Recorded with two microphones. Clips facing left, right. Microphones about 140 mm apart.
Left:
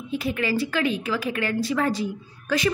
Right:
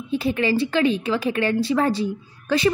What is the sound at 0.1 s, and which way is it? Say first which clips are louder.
A woman's voice: right 4 dB; 30° right (ahead or behind).